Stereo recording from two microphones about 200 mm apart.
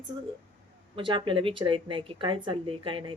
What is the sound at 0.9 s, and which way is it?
A woman's voice, 25° right (ahead or behind).